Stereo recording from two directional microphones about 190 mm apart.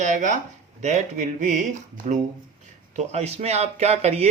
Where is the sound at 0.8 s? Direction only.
40° right (ahead or behind).